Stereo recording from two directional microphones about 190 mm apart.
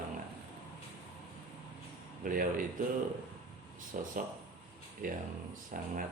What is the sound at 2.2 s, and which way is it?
Speech, 45° right (ahead or behind).